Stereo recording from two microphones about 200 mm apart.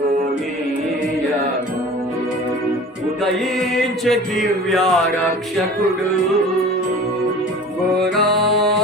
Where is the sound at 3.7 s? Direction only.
Centre (ahead or behind).